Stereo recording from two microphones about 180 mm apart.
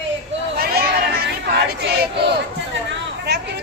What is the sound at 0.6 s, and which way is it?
Chatter, 60° right (ahead or behind).